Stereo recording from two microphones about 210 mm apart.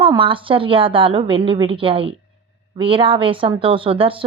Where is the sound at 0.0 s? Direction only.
25° right (ahead or behind).